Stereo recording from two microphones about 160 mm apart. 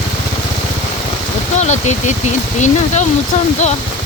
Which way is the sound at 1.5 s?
45° left (ahead or behind).